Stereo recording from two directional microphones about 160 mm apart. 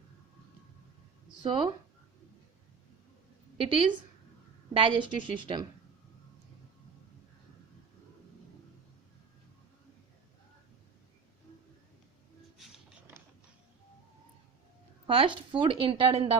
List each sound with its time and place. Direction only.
1.4 s a woman's voice: 30° right (ahead or behind)
3.6 s a woman's voice: 35° right (ahead or behind)
12.5 s a sound: centre (ahead or behind)
15.0 s a woman's voice: 35° right (ahead or behind)